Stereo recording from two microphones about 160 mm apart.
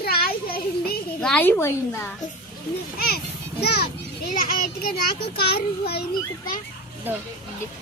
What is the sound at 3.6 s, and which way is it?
Speech, 85° left.